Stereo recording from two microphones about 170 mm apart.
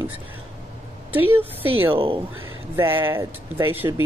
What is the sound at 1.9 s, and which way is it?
Speech, 30° right (ahead or behind).